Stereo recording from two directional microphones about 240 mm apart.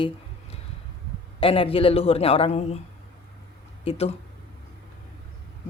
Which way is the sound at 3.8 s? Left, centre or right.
Left.